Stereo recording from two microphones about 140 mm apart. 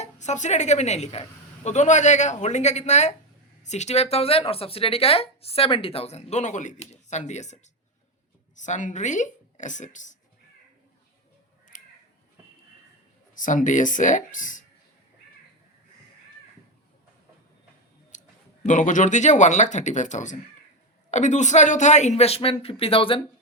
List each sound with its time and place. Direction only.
0.0 s a woman's voice: 55° left (ahead or behind)
11.7 s crow: 70° left (ahead or behind)
13.3 s a woman's voice: 65° left (ahead or behind)
18.1 s a sound: 60° left (ahead or behind)
18.6 s a woman's voice: 60° left (ahead or behind); by 23.2 s 40° left (ahead or behind)